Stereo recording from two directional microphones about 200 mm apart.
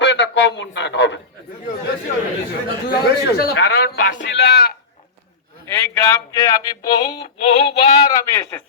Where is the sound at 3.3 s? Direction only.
50° left (ahead or behind).